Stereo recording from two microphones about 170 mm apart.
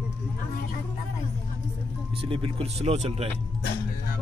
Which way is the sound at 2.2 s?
35° right (ahead or behind).